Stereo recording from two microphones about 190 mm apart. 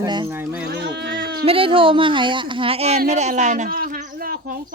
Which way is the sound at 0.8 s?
65° right (ahead or behind).